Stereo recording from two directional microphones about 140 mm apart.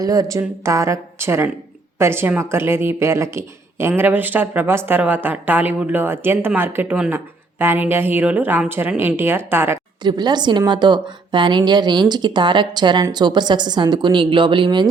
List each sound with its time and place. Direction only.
0.0 s speech: 25° right (ahead or behind)
10.0 s speech: 30° right (ahead or behind)